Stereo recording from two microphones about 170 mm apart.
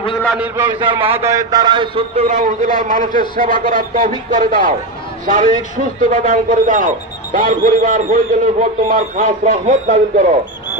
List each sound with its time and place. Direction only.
0.7 s a man's voice: 30° right (ahead or behind)
1.2 s a man's voice: 20° right (ahead or behind); by 10.2 s 50° right (ahead or behind)